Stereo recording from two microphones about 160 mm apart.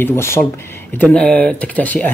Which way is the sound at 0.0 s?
15° left (ahead or behind).